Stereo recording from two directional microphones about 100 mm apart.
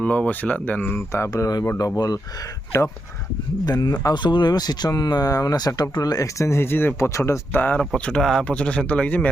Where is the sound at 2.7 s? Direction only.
30° left (ahead or behind).